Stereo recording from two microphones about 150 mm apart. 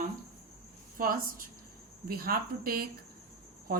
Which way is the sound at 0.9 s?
70° right (ahead or behind).